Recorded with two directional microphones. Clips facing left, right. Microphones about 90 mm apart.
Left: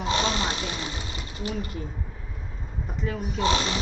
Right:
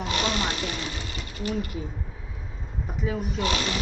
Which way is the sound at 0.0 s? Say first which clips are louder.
Left 1 dB; 30° left (ahead or behind).